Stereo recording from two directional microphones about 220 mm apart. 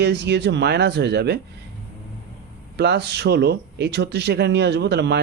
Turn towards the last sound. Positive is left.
turn(degrees=-50)  # may be behind; listen again after turning